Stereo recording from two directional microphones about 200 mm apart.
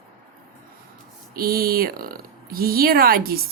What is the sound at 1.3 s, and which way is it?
Speech, 50° right (ahead or behind).